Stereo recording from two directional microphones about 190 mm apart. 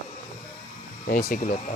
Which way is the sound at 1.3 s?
50° left (ahead or behind).